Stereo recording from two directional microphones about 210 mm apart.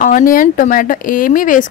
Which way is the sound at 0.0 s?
40° left (ahead or behind).